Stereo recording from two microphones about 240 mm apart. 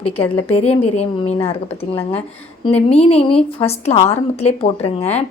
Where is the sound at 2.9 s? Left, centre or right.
Left.